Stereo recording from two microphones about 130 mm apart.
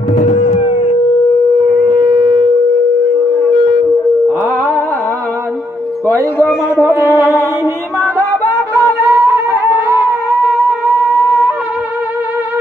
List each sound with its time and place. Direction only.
0.1 s a sound: 60° left (ahead or behind)
0.7 s howl: 50° left (ahead or behind)
1.7 s shofar: 5° left (ahead or behind)
6.8 s music: 20° right (ahead or behind)
9.1 s humming: 20° right (ahead or behind)